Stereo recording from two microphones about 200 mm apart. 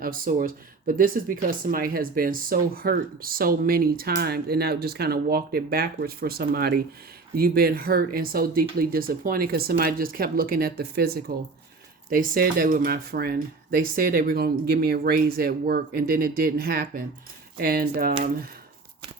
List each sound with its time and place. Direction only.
0.0 s speech: 45° right (ahead or behind)